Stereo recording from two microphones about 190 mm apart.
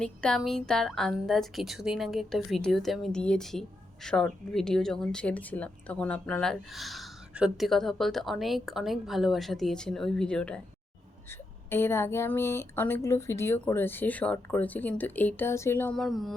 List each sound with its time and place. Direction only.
0.0 s a woman's voice: 5° left (ahead or behind)